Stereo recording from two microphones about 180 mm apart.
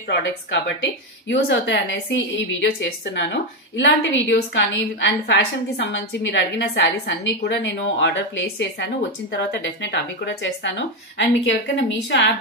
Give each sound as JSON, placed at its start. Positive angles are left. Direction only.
{"t": 0.1, "sound": "a woman's voice", "side_deg": 75}